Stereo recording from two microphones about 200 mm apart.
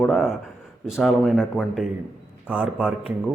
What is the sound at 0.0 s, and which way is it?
A man's voice, centre (ahead or behind).